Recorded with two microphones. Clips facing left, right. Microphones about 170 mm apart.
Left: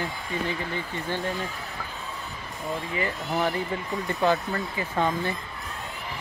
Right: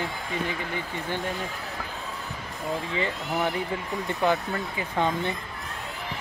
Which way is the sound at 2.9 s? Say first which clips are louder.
Left 1 dB; 25° right (ahead or behind).